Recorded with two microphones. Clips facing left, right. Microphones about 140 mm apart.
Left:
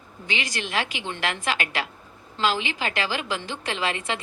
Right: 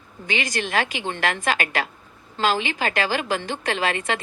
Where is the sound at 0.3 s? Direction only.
45° right (ahead or behind).